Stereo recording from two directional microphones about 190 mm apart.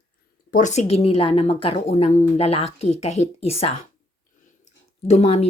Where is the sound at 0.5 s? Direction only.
40° left (ahead or behind).